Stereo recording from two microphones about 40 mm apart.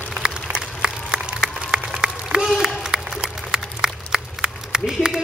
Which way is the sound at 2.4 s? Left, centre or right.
Centre.